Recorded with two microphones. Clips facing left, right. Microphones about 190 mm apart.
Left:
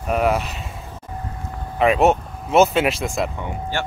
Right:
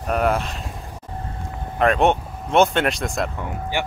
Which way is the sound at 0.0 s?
5° left (ahead or behind).